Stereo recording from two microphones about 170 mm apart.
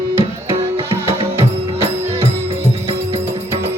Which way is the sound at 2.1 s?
35° right (ahead or behind).